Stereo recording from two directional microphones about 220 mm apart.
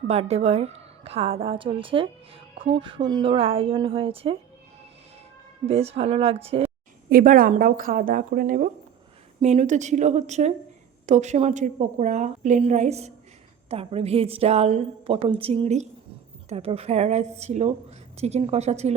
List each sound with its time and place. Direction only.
0.1 s a woman's voice: 30° right (ahead or behind)
5.6 s a woman's voice: 30° right (ahead or behind)
7.1 s a woman's voice: 40° right (ahead or behind)